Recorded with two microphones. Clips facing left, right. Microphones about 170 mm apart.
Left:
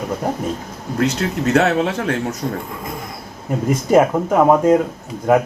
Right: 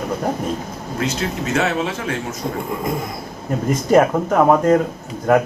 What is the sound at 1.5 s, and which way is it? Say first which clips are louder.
Speech: left 4 dB; 60° left (ahead or behind).